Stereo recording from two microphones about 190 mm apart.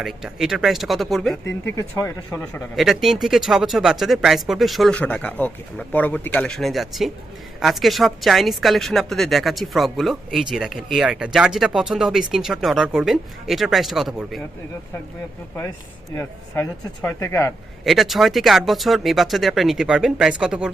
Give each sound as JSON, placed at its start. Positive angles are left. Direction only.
{"t": 0.0, "sound": "a woman's voice", "side_deg": 0}
{"t": 1.6, "sound": "a woman's voice", "side_deg": 15}
{"t": 16.1, "sound": "speech", "side_deg": 15}
{"t": 17.8, "sound": "a woman's voice", "side_deg": 0}